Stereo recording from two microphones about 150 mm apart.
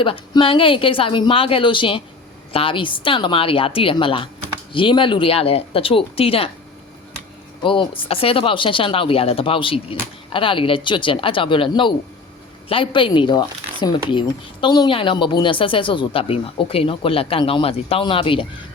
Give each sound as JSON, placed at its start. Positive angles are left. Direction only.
{"t": 0.0, "sound": "speech", "side_deg": 35}
{"t": 7.6, "sound": "speech", "side_deg": 35}